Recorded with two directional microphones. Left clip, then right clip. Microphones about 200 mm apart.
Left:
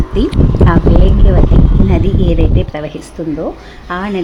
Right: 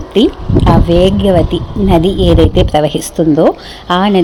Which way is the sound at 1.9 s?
15° right (ahead or behind).